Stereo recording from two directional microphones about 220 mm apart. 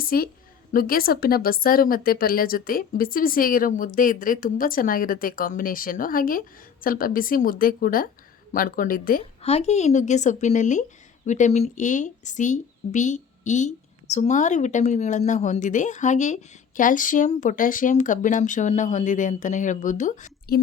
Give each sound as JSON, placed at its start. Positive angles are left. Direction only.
{"t": 0.0, "sound": "a woman's voice", "side_deg": 40}